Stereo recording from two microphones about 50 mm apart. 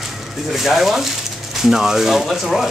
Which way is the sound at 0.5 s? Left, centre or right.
Centre.